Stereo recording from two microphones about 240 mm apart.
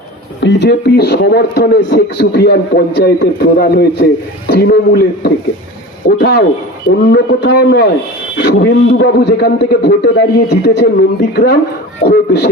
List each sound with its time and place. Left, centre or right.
0.4 s a man's voice: left